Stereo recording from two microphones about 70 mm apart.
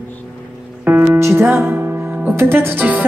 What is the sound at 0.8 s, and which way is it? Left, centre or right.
Music, right.